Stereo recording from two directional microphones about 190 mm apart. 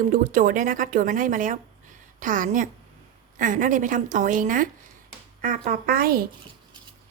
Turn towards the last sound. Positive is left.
turn(degrees=-50)  # may be behind; listen again after turning